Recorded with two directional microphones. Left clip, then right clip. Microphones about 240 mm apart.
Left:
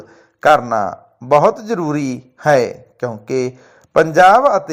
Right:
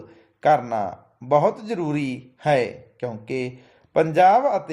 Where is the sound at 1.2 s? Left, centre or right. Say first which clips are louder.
Left 7 dB; centre.